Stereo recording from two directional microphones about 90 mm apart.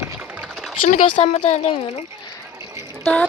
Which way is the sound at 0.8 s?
65° left (ahead or behind).